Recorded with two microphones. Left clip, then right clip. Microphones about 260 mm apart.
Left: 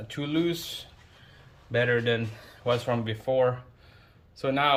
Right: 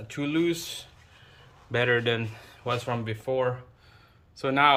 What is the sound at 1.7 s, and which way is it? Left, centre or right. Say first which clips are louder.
A man's voice: even; centre.